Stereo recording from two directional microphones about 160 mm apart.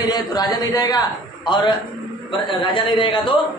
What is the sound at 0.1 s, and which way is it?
A man's voice, 25° left (ahead or behind).